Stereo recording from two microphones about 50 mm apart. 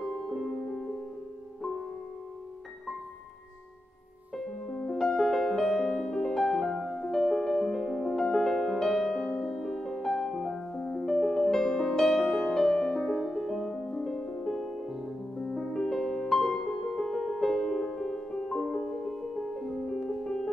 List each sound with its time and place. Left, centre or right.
0.0 s music: centre
4.7 s music: centre
12.7 s music: left
13.1 s music: centre